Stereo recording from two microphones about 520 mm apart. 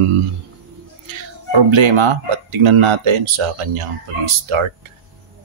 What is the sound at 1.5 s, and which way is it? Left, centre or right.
Speech, right.